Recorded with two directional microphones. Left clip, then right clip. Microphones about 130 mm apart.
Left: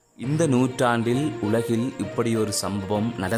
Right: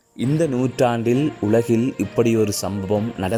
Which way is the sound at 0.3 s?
5° right (ahead or behind).